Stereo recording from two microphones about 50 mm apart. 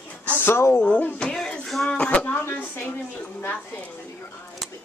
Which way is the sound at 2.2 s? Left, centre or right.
Left.